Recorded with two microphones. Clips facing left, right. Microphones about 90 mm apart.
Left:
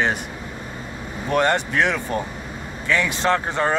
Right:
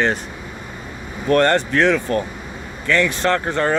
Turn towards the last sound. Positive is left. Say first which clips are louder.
# right 2 dB
turn(degrees=15)  # may be behind; listen again after turning